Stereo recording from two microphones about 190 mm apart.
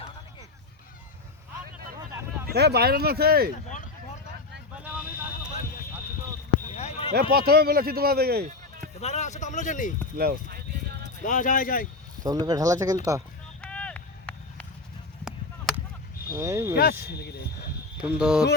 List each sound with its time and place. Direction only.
2.5 s speech: 60° right (ahead or behind)
4.8 s a sound: 5° right (ahead or behind)
6.7 s a sound: 35° left (ahead or behind)
7.1 s speech: 55° right (ahead or behind)
9.0 s speech: 35° left (ahead or behind)
10.2 s a sound: 55° right (ahead or behind)
11.2 s speech: 45° left (ahead or behind)
12.2 s speech: 20° right (ahead or behind)
13.6 s vehicle: 5° left (ahead or behind)
15.2 s a sound: 5° right (ahead or behind)
16.3 s speech: 15° right (ahead or behind)
17.2 s speech: 60° left (ahead or behind)
18.2 s speech: centre (ahead or behind)